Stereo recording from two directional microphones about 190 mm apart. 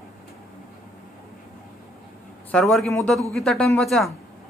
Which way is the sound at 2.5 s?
Centre (ahead or behind).